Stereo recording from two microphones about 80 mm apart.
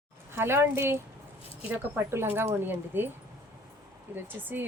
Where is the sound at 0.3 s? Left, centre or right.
Right.